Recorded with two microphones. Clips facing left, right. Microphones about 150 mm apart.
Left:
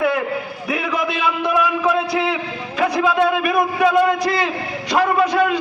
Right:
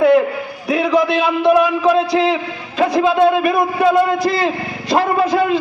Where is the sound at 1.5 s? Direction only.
25° right (ahead or behind).